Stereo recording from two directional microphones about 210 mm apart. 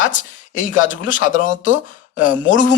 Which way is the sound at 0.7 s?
65° left (ahead or behind).